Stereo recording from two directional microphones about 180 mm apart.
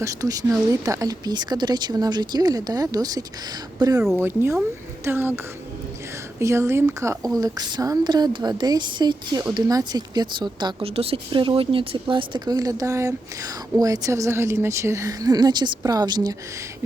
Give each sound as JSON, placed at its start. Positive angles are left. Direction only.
{"t": 0.0, "sound": "a woman's voice", "side_deg": -20}
{"t": 6.4, "sound": "a woman's voice", "side_deg": -15}